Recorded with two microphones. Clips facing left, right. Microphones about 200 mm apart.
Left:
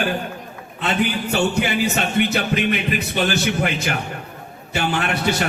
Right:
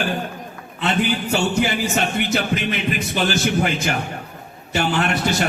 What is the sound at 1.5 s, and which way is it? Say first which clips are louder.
Music: even; 60° left (ahead or behind).